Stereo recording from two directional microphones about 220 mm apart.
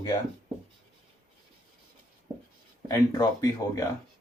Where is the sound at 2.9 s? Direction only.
15° left (ahead or behind).